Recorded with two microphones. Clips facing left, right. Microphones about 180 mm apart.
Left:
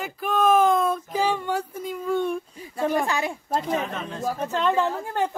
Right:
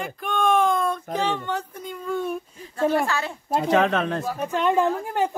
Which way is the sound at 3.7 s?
85° right.